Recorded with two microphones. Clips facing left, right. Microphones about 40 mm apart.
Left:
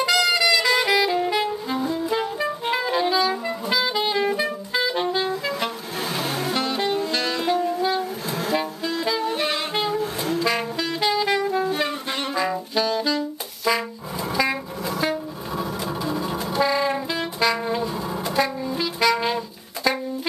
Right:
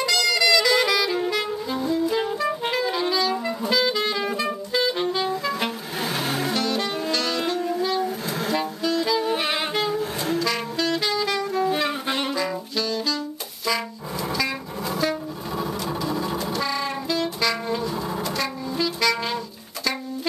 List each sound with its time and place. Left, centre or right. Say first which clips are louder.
0.0 s saxophone: left 2 dB; centre
6.5 s saxophone: left 1 dB; centre
8.0 s a sound: right 1 dB; centre
8.5 s saxophone: right 1 dB; centre
9.2 s saxophone: even; centre
9.8 s saxophone: left 1 dB; centre
10.4 s saxophone: left 1 dB; centre
12.1 s saxophone: right 2 dB; centre
12.4 s saxophone: left 3 dB; centre
15.5 s a sound: even; centre
16.0 s sewing machine: even; centre
16.5 s music: left 5 dB; centre
18.2 s train: left 4 dB; centre